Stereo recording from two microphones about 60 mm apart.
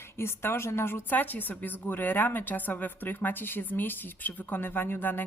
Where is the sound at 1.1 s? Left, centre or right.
Left.